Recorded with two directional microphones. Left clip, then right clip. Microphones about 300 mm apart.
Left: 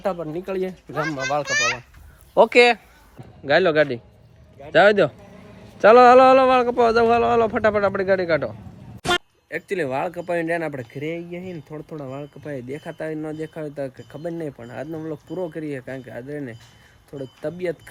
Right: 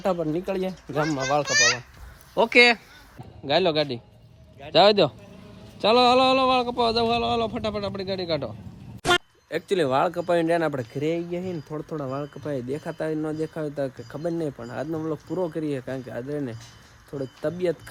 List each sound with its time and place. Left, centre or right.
0.0 s speech: centre
1.5 s a child's voice: left
2.3 s speech: centre